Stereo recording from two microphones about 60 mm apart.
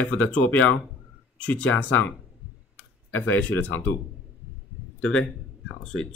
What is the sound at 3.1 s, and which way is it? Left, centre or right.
Speech, left.